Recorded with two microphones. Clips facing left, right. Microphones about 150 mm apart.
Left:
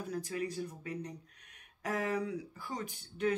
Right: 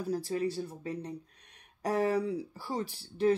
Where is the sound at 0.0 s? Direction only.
35° right (ahead or behind).